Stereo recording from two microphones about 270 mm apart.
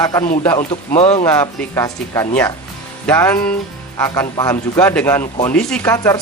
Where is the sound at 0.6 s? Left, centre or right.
Left.